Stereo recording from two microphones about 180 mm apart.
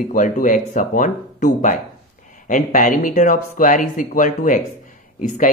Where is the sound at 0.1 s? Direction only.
45° left (ahead or behind).